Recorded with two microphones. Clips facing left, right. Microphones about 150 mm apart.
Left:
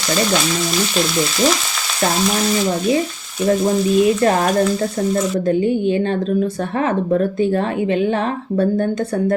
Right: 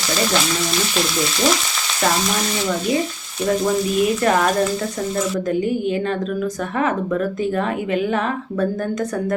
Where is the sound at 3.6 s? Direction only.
30° left (ahead or behind).